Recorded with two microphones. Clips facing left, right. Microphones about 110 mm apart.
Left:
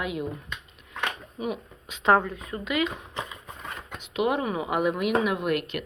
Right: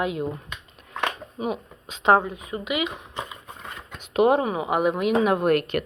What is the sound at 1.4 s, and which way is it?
Speech, 25° right (ahead or behind).